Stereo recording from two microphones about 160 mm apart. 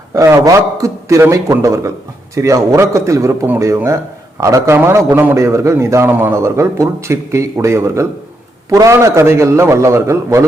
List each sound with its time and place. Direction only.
0.1 s a man's voice: 20° right (ahead or behind)